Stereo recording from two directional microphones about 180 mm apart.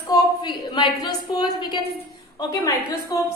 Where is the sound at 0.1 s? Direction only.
25° left (ahead or behind).